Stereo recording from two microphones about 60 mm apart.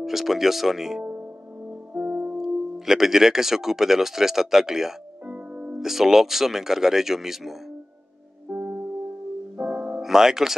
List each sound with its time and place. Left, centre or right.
0.0 s speech: centre
2.0 s music: right
2.3 s speech: centre
5.3 s music: right
5.8 s speech: centre
8.5 s music: right
9.6 s music: right